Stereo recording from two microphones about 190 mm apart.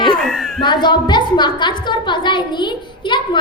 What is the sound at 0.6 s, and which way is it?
A child's voice, 25° left (ahead or behind).